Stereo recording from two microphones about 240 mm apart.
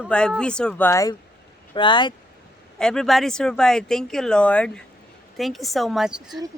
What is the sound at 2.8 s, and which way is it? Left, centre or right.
Speech, centre.